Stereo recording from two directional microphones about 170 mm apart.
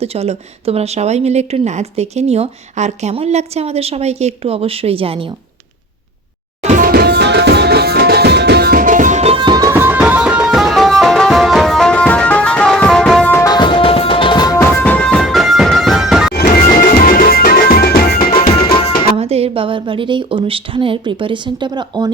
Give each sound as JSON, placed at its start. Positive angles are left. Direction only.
{"t": 0.0, "sound": "a woman's voice", "side_deg": -35}
{"t": 6.6, "sound": "music", "side_deg": -45}
{"t": 6.8, "sound": "music", "side_deg": -70}
{"t": 13.5, "sound": "music", "side_deg": 25}
{"t": 16.3, "sound": "music", "side_deg": 65}
{"t": 18.5, "sound": "music", "side_deg": 35}
{"t": 19.1, "sound": "a woman's voice", "side_deg": -35}